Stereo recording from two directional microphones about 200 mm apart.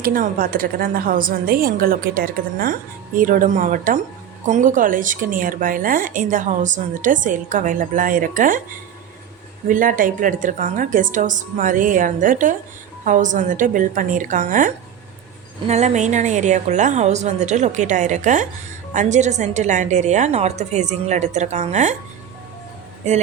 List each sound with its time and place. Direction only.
0.0 s a woman's voice: 45° right (ahead or behind)
9.6 s a woman's voice: 40° right (ahead or behind)